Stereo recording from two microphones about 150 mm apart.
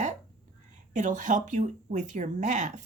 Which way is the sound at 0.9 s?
55° right (ahead or behind).